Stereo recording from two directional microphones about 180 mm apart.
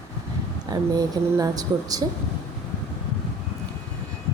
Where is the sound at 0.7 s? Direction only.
20° right (ahead or behind).